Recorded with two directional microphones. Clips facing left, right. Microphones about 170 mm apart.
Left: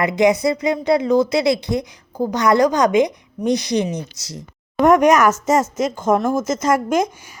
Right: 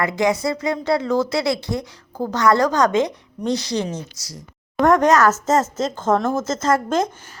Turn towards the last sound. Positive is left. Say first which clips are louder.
# left 2 dB
turn(degrees=15)  # may be behind; listen again after turning